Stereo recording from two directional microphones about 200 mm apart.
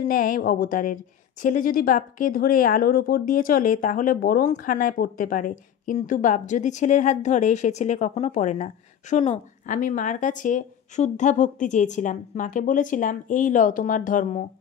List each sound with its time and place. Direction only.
0.1 s a woman's voice: 45° left (ahead or behind)